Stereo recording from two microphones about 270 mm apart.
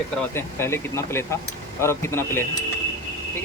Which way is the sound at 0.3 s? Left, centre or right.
Centre.